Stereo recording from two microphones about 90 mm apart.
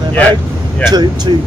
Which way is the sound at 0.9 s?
55° right (ahead or behind).